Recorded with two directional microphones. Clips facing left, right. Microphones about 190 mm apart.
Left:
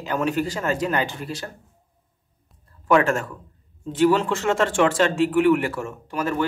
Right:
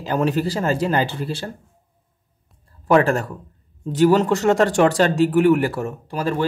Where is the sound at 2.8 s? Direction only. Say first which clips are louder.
Right 3 dB; 35° right (ahead or behind).